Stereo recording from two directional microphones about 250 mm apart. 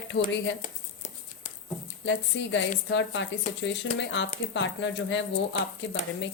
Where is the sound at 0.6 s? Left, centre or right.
Left.